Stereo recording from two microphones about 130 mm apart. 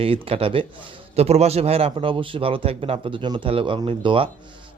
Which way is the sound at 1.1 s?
55° right (ahead or behind).